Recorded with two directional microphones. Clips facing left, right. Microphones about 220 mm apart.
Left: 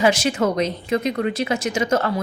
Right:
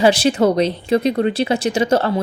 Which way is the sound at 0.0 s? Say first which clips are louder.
Right 5 dB; 30° right (ahead or behind).